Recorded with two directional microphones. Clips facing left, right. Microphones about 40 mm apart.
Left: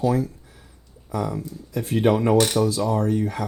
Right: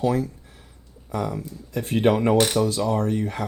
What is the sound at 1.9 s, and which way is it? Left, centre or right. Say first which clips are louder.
Speech: even; right.